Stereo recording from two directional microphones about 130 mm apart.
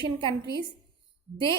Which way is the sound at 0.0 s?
40° right (ahead or behind).